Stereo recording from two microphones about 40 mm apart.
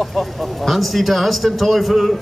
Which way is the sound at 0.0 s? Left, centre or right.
Centre.